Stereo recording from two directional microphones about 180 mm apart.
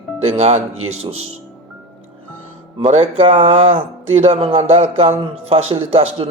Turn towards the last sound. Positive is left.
turn(degrees=-35)  # may be behind; listen again after turning